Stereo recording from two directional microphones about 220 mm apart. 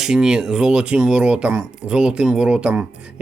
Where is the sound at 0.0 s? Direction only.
5° right (ahead or behind).